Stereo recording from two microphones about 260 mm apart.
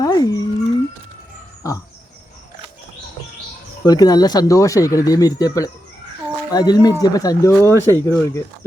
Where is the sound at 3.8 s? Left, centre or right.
Centre.